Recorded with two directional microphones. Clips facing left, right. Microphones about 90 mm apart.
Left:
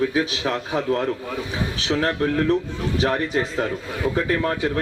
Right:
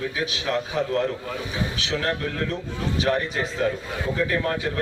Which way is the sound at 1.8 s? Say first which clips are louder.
Left 6 dB; 35° left (ahead or behind).